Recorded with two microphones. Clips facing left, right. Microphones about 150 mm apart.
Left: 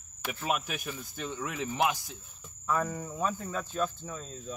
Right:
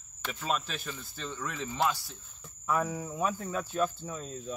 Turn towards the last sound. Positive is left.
turn(degrees=-5)  # may be behind; listen again after turning